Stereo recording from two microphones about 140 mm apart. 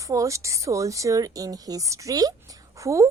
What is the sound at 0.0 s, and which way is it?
A woman's voice, 25° right (ahead or behind).